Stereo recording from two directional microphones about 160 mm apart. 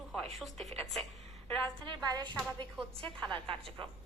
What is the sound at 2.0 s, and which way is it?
Speech, 25° right (ahead or behind).